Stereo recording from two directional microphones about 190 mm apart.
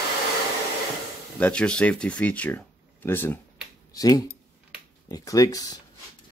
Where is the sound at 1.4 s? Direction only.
5° left (ahead or behind).